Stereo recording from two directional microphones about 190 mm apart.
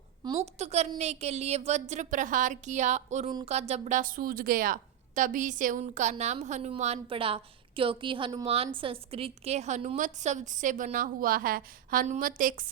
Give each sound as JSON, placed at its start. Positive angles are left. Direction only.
{"t": 0.3, "sound": "a woman's voice", "side_deg": -35}